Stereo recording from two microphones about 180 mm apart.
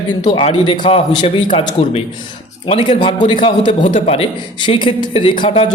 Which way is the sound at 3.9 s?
40° left (ahead or behind).